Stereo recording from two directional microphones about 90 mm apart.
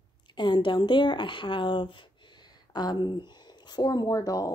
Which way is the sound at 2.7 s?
55° left (ahead or behind).